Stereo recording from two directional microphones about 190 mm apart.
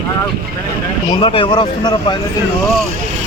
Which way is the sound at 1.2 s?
30° left (ahead or behind).